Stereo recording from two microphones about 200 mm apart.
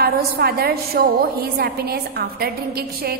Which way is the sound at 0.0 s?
50° right (ahead or behind).